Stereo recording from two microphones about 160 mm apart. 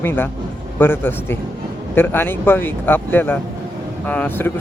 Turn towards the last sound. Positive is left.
turn(degrees=15)  # may be behind; listen again after turning